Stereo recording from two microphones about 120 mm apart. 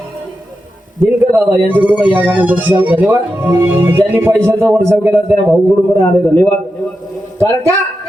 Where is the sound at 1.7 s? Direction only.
15° right (ahead or behind).